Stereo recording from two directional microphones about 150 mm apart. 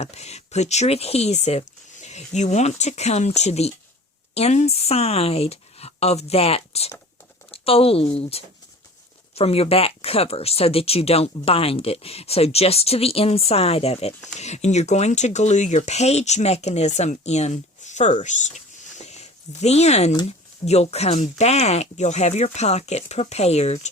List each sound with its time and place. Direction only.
0.0 s speech: 45° left (ahead or behind)
18.9 s a sound: 50° left (ahead or behind)
20.7 s speech: 45° left (ahead or behind)